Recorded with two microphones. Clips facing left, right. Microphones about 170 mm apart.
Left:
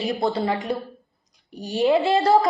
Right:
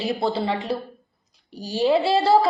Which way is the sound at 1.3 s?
35° right (ahead or behind).